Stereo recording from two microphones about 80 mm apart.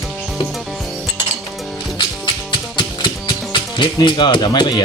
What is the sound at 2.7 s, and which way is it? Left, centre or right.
Music, left.